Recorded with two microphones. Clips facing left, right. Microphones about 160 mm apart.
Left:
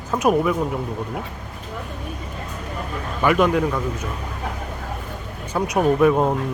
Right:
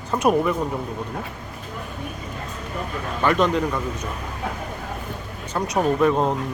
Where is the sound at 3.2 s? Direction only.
10° left (ahead or behind).